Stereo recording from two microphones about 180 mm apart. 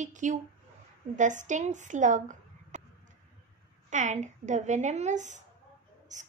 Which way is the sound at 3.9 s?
45° right (ahead or behind).